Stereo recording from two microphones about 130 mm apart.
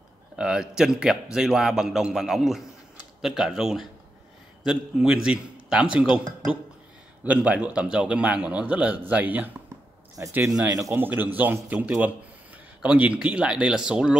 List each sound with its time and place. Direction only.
0.4 s a man's voice: 5° right (ahead or behind)
7.2 s a man's voice: 10° right (ahead or behind)